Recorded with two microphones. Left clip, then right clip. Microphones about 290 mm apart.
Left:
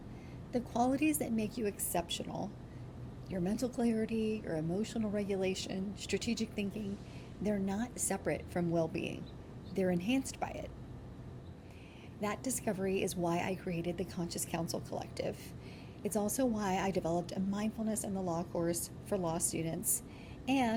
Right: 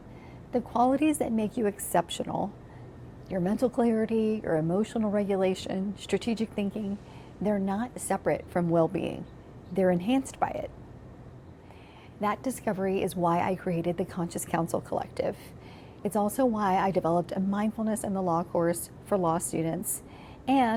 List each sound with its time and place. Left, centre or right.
0.5 s a woman's voice: right
12.2 s speech: right